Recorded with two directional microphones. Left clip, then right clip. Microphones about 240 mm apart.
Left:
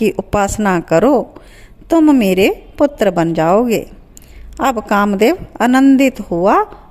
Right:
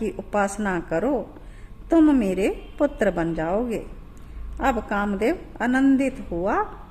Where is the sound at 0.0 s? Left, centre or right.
Left.